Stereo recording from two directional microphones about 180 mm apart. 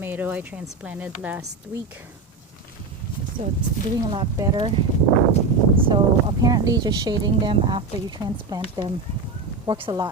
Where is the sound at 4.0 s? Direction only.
25° right (ahead or behind).